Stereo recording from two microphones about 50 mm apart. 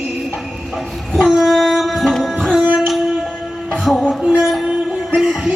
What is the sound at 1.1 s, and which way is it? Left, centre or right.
Music, centre.